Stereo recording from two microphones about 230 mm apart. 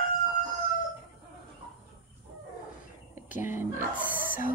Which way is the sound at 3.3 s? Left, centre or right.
Centre.